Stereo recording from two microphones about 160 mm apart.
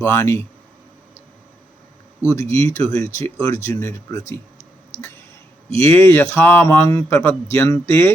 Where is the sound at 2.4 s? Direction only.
20° left (ahead or behind).